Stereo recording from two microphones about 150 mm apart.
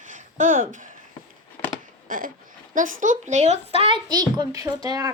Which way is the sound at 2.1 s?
65° right (ahead or behind).